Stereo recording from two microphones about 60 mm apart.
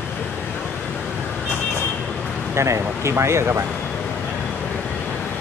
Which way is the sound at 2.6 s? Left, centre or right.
Right.